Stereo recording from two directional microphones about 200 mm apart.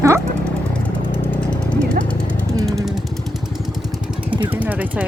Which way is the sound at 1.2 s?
5° left (ahead or behind).